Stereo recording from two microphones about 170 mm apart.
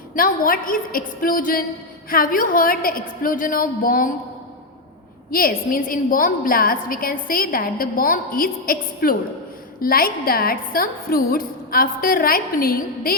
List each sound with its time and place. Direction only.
0.2 s a woman's voice: 55° left (ahead or behind)
5.3 s a woman's voice: 60° left (ahead or behind)